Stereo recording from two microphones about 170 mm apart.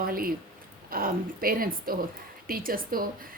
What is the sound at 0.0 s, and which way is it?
A woman's voice, 60° right (ahead or behind).